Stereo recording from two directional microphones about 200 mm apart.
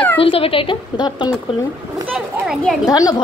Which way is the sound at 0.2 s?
25° left (ahead or behind).